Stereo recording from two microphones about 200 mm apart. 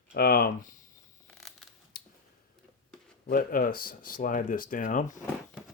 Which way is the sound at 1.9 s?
45° left (ahead or behind).